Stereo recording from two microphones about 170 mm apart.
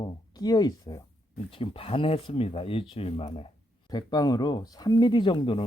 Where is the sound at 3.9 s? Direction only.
25° left (ahead or behind).